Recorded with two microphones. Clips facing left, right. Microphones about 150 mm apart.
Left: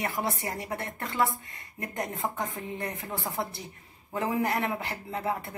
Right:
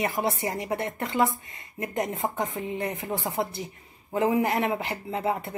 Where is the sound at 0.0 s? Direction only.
20° right (ahead or behind).